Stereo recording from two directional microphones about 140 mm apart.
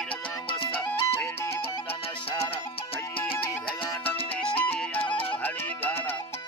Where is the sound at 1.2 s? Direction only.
20° left (ahead or behind).